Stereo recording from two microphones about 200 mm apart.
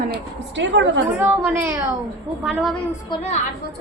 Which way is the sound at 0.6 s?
65° right (ahead or behind).